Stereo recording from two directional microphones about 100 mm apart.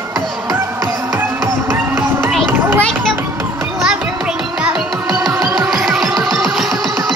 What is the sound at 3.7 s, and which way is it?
Music, 10° right (ahead or behind).